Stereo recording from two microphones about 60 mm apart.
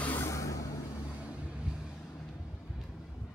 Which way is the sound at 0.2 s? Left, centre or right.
Left.